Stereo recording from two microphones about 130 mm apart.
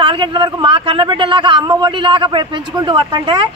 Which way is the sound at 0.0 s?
40° right (ahead or behind).